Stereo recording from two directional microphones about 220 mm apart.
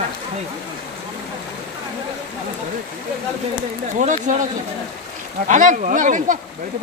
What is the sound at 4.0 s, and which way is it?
Speech, 35° right (ahead or behind).